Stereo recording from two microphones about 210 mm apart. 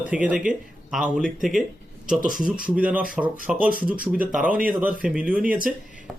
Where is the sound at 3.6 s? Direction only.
40° right (ahead or behind).